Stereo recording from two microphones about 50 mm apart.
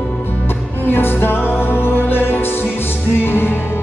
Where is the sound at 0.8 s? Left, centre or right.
Left.